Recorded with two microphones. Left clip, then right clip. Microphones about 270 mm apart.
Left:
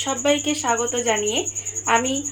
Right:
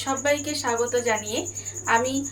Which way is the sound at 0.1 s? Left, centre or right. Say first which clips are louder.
Left 3 dB; left.